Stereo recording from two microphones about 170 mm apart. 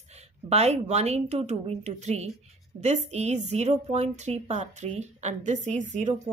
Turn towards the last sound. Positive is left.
turn(degrees=-45)  # may be behind; listen again after turning